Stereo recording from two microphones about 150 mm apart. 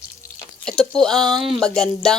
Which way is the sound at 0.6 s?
5° left (ahead or behind).